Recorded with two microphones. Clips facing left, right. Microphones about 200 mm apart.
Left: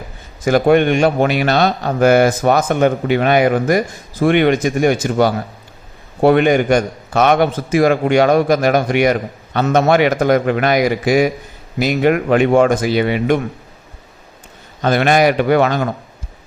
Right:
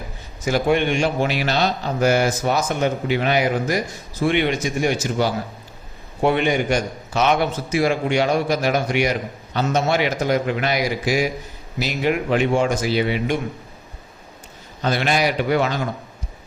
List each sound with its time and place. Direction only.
0.4 s a man's voice: 55° left (ahead or behind)
6.3 s a man's voice: 55° left (ahead or behind)
14.8 s a man's voice: 55° left (ahead or behind)